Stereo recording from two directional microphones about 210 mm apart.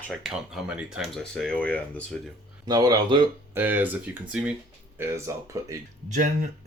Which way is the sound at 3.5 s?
10° right (ahead or behind).